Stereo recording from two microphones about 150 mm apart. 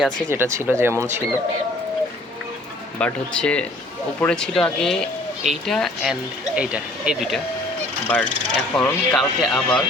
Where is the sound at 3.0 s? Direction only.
5° left (ahead or behind).